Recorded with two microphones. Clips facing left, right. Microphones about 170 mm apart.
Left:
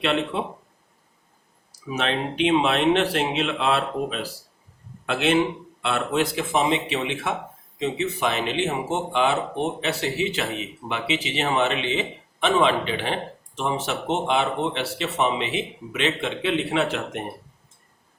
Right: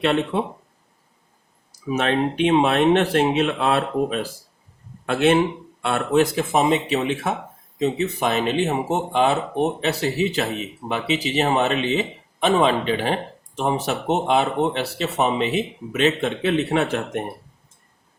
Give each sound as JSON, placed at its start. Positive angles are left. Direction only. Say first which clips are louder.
{"t": 0.0, "sound": "speech", "louder": "right 3 dB", "side_deg": -45}
{"t": 1.9, "sound": "speech", "louder": "right 5 dB", "side_deg": -45}